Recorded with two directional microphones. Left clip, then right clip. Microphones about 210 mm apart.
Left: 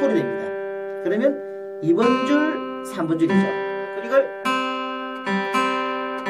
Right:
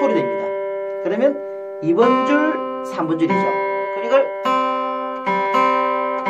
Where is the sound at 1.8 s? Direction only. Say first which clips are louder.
Right 4 dB; 5° left (ahead or behind).